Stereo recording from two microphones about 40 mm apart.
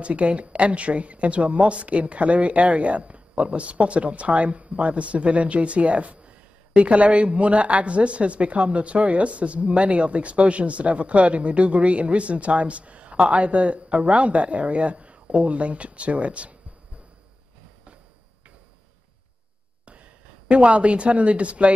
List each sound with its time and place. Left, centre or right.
0.0 s a woman's voice: right
19.8 s speech: right